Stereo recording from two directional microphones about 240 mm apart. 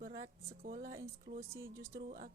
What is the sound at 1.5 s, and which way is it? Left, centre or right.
Speech, centre.